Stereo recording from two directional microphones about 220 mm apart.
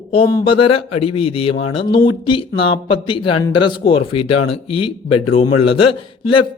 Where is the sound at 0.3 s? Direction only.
20° left (ahead or behind).